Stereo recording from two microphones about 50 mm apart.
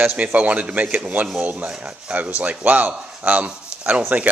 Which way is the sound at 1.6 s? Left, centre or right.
Centre.